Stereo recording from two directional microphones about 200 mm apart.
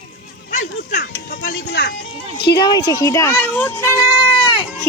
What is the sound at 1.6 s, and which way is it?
Music, 60° left (ahead or behind).